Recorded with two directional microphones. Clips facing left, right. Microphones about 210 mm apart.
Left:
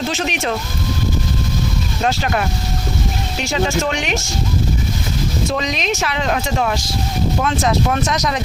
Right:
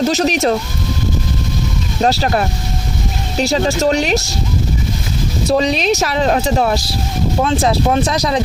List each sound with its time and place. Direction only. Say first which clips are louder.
0.0 s speech: right 7 dB; 40° right (ahead or behind)
2.0 s speech: right 5 dB; 35° right (ahead or behind)
5.5 s speech: right 10 dB; 35° right (ahead or behind)